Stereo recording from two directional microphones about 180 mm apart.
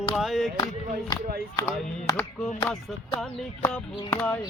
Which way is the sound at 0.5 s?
20° left (ahead or behind).